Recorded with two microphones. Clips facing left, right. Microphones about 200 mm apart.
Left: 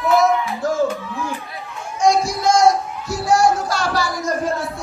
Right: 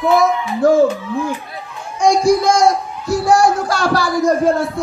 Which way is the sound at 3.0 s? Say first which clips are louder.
Right 4 dB; 60° right (ahead or behind).